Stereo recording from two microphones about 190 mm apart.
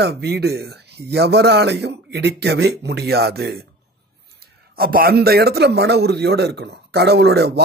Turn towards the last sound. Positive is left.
turn(degrees=-60)  # may be behind; listen again after turning